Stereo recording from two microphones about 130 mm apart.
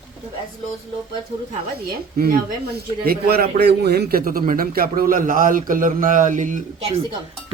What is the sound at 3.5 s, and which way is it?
A man's voice, 85° right.